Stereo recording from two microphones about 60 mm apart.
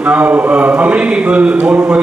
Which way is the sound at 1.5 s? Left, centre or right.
Right.